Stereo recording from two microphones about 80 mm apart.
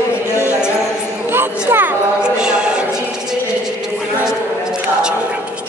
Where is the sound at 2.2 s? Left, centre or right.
Centre.